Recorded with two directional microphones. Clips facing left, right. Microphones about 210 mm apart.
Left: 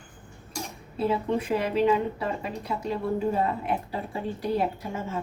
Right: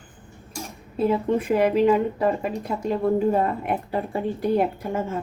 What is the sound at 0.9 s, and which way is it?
A woman's voice, 50° right (ahead or behind).